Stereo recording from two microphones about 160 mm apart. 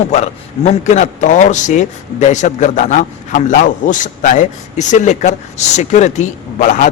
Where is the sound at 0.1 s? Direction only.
40° left (ahead or behind).